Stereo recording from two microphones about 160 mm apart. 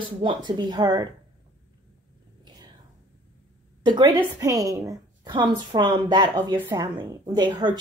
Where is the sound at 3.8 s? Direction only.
30° right (ahead or behind).